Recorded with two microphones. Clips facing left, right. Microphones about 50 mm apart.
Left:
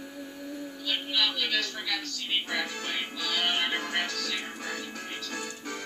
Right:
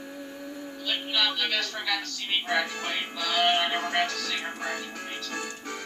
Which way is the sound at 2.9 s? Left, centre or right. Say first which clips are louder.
Right 2 dB; right.